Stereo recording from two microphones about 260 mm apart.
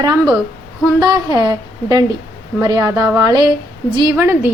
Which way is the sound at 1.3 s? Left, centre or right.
Centre.